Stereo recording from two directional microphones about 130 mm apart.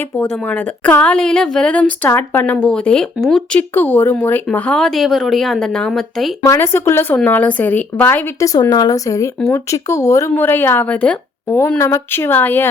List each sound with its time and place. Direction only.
0.2 s a woman's voice: 15° left (ahead or behind)
3.8 s a woman's voice: 15° left (ahead or behind)
6.4 s a woman's voice: 20° left (ahead or behind)
8.7 s a woman's voice: 30° left (ahead or behind); by 12.6 s 15° left (ahead or behind)